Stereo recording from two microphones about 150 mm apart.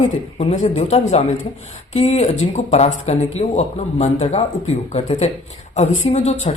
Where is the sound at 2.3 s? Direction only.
45° left (ahead or behind).